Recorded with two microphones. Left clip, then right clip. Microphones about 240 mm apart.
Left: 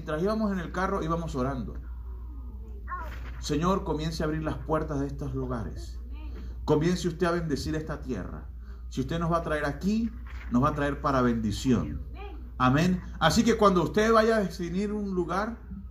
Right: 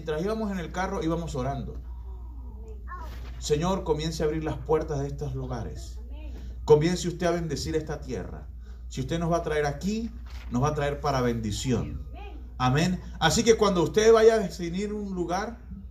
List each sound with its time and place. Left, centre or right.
0.0 s a man's voice: right
3.4 s a man's voice: right
11.1 s a man's voice: right